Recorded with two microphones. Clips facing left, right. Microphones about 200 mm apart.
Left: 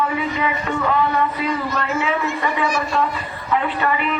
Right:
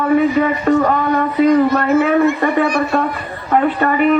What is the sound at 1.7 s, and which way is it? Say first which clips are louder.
A man's voice: right 9 dB; 55° right (ahead or behind).